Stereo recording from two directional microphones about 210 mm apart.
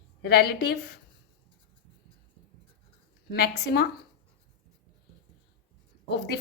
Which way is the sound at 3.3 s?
50° left (ahead or behind).